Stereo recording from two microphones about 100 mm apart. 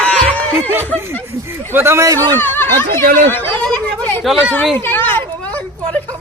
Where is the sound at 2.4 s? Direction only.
20° left (ahead or behind).